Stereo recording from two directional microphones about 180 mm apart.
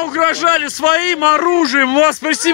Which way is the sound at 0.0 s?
30° left (ahead or behind).